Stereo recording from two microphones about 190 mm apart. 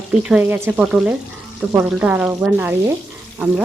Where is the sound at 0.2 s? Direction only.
5° right (ahead or behind).